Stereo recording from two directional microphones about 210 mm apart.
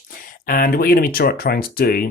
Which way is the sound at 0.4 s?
45° left (ahead or behind).